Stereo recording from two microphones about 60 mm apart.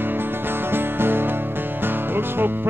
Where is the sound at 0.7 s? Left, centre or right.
Right.